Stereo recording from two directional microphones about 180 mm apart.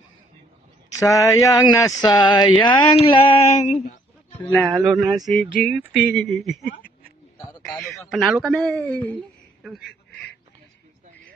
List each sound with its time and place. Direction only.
0.9 s speech: 15° left (ahead or behind)
4.4 s speech: 10° left (ahead or behind)
4.7 s a man's voice: centre (ahead or behind)
7.3 s a sound: 5° left (ahead or behind)
8.1 s a man's voice: centre (ahead or behind)